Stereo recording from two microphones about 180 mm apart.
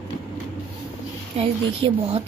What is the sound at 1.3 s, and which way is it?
Speech, 35° right (ahead or behind).